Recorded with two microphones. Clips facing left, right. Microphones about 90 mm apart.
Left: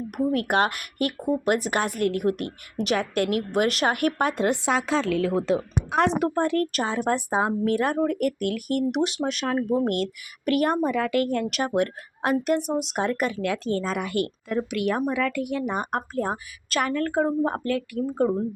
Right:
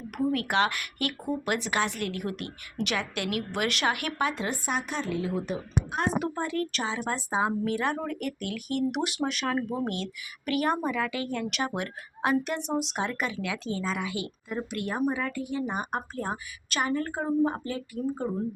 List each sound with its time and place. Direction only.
0.3 s a woman's voice: 50° left (ahead or behind); by 6.1 s 90° left
6.2 s speech: 60° left (ahead or behind); by 9.6 s 35° left (ahead or behind)
9.8 s speech: 50° left (ahead or behind)
16.8 s speech: 65° left (ahead or behind)